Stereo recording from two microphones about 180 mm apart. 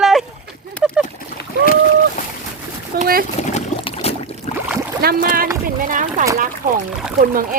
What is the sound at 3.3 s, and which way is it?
Trickle, 40° left (ahead or behind).